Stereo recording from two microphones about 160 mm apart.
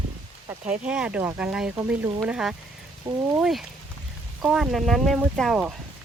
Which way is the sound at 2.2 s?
5° right (ahead or behind).